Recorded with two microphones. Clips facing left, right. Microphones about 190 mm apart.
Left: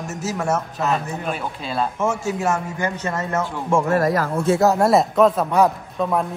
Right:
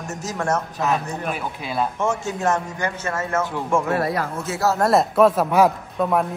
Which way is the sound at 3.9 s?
45° left (ahead or behind).